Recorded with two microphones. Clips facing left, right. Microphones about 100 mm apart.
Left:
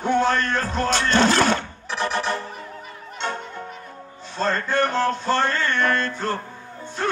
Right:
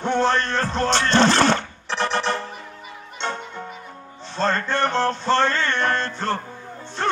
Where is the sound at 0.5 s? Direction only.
5° left (ahead or behind).